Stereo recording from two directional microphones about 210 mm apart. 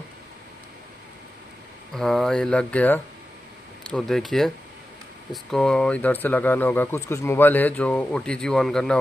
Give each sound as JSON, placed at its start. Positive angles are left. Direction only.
{"t": 2.0, "sound": "speech", "side_deg": 0}